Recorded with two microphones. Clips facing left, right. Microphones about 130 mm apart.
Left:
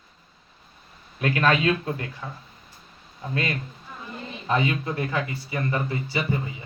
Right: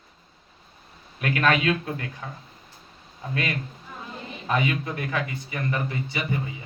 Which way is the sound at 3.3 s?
30° left (ahead or behind).